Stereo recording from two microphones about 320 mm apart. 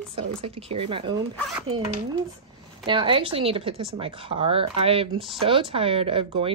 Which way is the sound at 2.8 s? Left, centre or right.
Centre.